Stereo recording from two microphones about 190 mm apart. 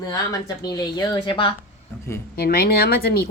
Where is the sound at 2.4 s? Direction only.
50° left (ahead or behind).